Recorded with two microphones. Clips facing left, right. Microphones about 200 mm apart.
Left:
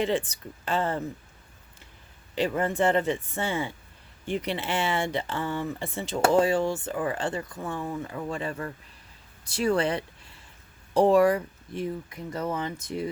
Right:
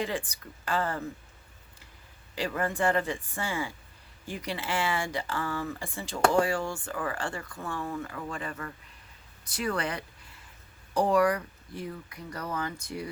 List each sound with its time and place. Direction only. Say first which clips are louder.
0.0 s speech: left 6 dB; 25° left (ahead or behind)
2.3 s speech: left 5 dB; 20° left (ahead or behind)